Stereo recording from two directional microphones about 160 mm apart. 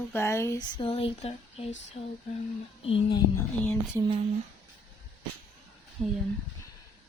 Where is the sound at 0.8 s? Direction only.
35° left (ahead or behind).